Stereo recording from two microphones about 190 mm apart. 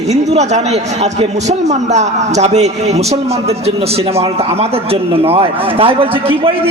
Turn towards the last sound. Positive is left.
turn(degrees=-30)  # may be behind; listen again after turning